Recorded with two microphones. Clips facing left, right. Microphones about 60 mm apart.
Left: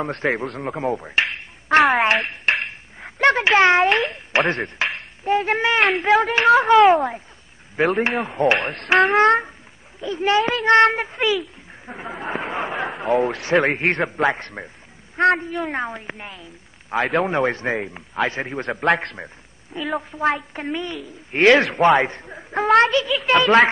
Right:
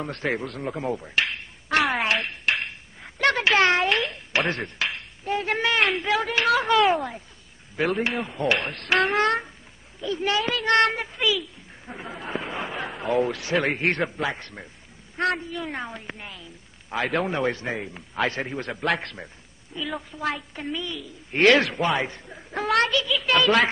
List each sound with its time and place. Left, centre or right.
0.0 s a man's voice: left
2.0 s a sound: left
3.9 s speech: left
5.8 s a man's voice: left
8.5 s a man's voice: left
11.8 s speech: left
12.2 s a man's voice: left
14.3 s a man's voice: left
18.1 s a man's voice: centre
18.4 s a man's voice: left
21.3 s a man's voice: left
22.0 s a man's voice: left